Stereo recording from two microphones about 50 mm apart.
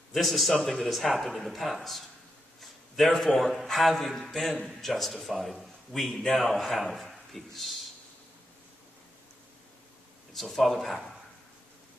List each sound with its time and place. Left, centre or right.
0.1 s speech: centre
2.6 s a sound: centre
3.5 s speech: centre
10.3 s speech: centre